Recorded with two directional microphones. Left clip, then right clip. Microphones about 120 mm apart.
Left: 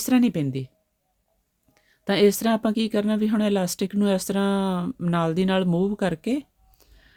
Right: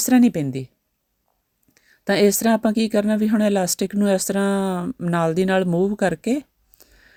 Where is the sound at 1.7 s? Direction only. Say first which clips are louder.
Right 3 dB; 35° right (ahead or behind).